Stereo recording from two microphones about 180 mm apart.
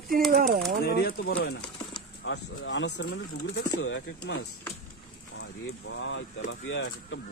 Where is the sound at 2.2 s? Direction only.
90° left.